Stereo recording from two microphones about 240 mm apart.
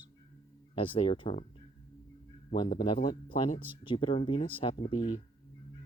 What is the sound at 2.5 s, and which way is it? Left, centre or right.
Speech, centre.